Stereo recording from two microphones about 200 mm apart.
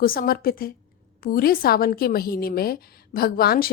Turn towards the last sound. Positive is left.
turn(degrees=50)  # may be behind; listen again after turning